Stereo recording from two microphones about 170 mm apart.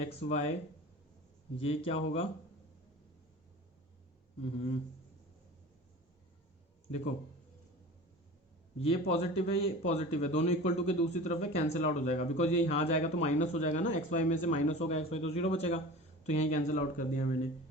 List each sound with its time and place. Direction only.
0.0 s speech: 40° left (ahead or behind)
1.5 s speech: 35° left (ahead or behind)
8.8 s speech: 35° left (ahead or behind)